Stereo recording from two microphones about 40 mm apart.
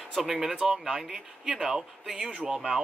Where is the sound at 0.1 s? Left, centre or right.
Centre.